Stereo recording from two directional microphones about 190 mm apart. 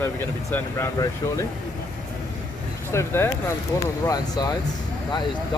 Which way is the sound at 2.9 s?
10° left (ahead or behind).